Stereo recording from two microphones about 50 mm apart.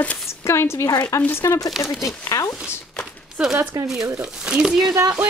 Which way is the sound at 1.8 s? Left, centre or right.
Left.